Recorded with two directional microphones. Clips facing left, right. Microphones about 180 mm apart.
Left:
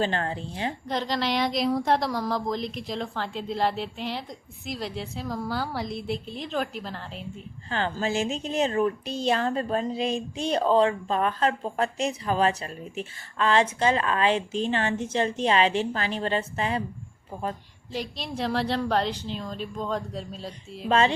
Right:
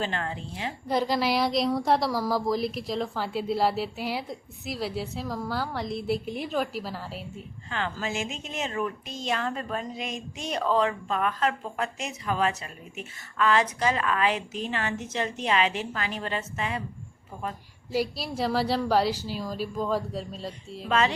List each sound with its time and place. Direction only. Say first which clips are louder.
0.0 s speech: left 4 dB; 35° left (ahead or behind)
0.9 s a woman's voice: right 4 dB; 10° right (ahead or behind)
7.7 s speech: left 4 dB; 35° left (ahead or behind)
17.9 s a woman's voice: right 4 dB; 5° right (ahead or behind)
20.8 s speech: left 3 dB; 30° left (ahead or behind)